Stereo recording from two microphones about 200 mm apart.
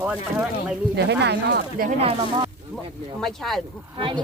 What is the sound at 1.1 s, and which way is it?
Speech, 55° right (ahead or behind).